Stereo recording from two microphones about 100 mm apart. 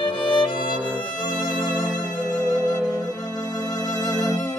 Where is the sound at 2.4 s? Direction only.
40° left (ahead or behind).